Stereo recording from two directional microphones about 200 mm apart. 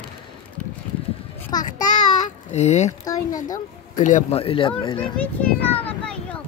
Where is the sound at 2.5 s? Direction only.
35° left (ahead or behind).